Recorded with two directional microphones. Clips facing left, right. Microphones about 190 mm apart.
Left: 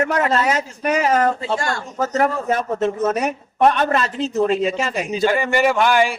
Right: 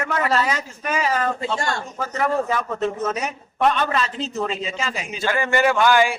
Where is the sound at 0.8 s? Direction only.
55° left (ahead or behind).